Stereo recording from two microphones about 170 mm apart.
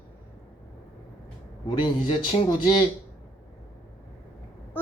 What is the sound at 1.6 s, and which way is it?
A man's voice, 30° left (ahead or behind).